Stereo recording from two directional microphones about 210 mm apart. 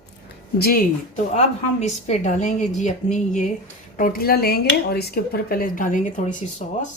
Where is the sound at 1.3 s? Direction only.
30° left (ahead or behind).